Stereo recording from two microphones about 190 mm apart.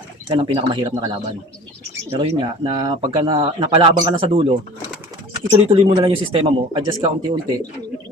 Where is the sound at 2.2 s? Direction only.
25° right (ahead or behind).